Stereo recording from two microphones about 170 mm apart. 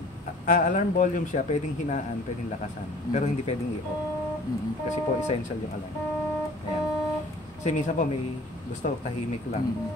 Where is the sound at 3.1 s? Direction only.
40° left (ahead or behind).